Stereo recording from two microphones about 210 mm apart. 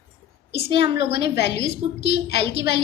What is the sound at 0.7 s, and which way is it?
A woman's voice, 50° left (ahead or behind).